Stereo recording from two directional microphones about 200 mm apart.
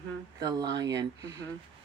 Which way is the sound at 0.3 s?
20° right (ahead or behind).